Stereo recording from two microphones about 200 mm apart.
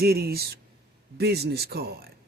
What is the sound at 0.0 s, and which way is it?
Speech, 50° right (ahead or behind).